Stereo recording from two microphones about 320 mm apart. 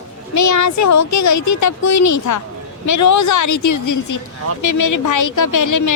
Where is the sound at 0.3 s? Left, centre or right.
Left.